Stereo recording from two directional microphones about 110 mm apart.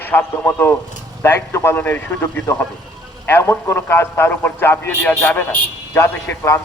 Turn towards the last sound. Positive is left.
turn(degrees=20)  # may be behind; listen again after turning